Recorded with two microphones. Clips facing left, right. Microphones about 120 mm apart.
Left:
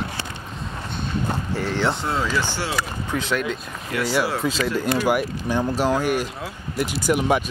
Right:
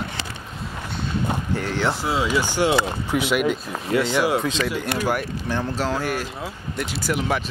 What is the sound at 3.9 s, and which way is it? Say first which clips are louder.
Speech: right 4 dB; 25° right (ahead or behind).